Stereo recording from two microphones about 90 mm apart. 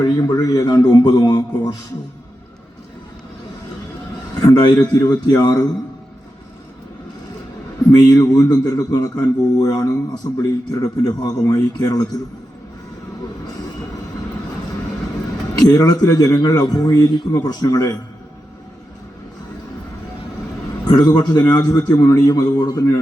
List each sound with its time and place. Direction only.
0.0 s a man's voice: 40° left (ahead or behind)
4.4 s a man's voice: 45° left (ahead or behind)
7.9 s a man's voice: 45° left (ahead or behind)
15.5 s a man's voice: 45° left (ahead or behind)
20.8 s a man's voice: 45° left (ahead or behind)